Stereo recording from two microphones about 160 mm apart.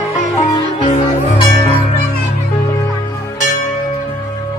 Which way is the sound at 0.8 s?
35° left (ahead or behind).